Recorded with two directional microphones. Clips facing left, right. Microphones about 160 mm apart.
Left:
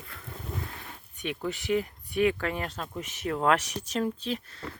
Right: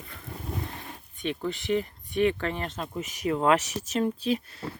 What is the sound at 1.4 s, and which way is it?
Speech, 5° left (ahead or behind).